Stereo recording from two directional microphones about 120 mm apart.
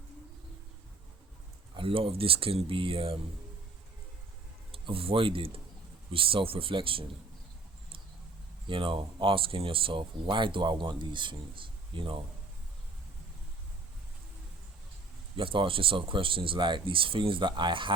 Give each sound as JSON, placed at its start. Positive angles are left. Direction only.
{"t": 1.7, "sound": "speech", "side_deg": -50}
{"t": 4.7, "sound": "speech", "side_deg": -50}
{"t": 8.6, "sound": "speech", "side_deg": -45}
{"t": 15.4, "sound": "speech", "side_deg": -45}